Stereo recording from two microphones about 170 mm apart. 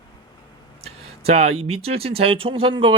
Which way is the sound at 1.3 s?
35° right (ahead or behind).